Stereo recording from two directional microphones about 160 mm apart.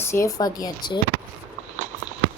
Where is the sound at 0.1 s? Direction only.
20° left (ahead or behind).